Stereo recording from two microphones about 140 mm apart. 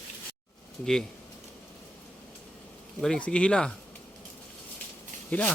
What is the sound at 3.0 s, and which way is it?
Speech, 5° left (ahead or behind).